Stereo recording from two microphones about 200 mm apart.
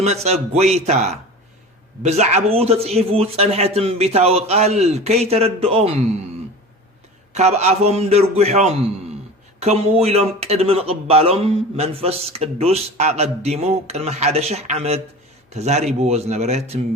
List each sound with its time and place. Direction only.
0.0 s speech: 30° right (ahead or behind)
7.3 s speech: 35° right (ahead or behind)